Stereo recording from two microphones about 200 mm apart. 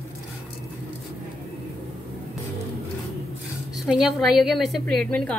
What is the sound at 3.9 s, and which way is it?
A woman's voice, centre (ahead or behind).